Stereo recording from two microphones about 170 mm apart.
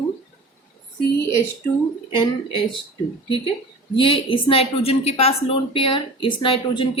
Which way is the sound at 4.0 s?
30° left (ahead or behind).